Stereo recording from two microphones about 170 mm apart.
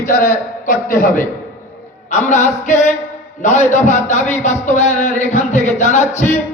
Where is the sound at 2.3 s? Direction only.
45° left (ahead or behind).